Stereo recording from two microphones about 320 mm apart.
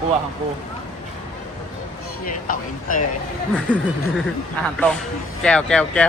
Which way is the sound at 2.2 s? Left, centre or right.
Left.